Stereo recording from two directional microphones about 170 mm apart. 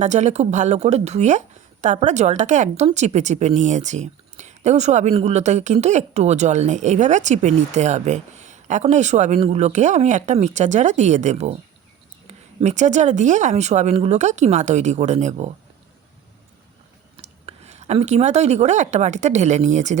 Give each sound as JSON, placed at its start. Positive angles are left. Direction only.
{"t": 0.0, "sound": "a woman's voice", "side_deg": -45}
{"t": 17.2, "sound": "a woman's voice", "side_deg": -40}